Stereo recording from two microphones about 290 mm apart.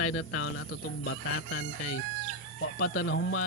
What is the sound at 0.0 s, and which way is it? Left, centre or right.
Speech, left.